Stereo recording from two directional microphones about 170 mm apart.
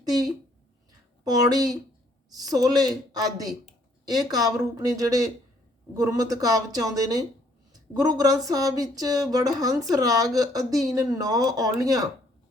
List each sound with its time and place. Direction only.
0.0 s a woman's voice: 20° right (ahead or behind)